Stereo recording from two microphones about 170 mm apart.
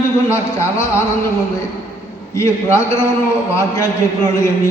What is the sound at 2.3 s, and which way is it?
A man's voice, 15° left (ahead or behind).